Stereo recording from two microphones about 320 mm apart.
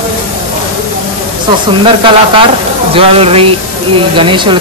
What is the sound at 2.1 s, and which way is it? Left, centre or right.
Speech, centre.